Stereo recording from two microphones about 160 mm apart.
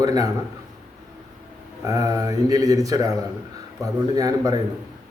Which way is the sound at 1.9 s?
20° right (ahead or behind).